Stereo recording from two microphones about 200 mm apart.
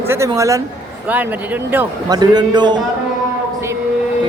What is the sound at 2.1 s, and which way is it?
Speech, 20° right (ahead or behind).